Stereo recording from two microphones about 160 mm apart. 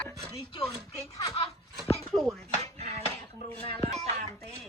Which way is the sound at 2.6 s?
40° right (ahead or behind).